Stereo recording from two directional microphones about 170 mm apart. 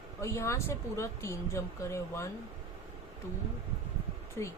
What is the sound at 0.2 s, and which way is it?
Speech, 15° left (ahead or behind).